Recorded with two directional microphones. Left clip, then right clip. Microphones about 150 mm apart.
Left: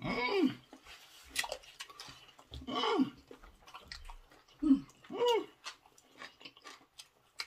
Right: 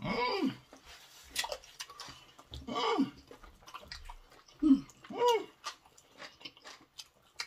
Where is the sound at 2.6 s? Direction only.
30° left (ahead or behind).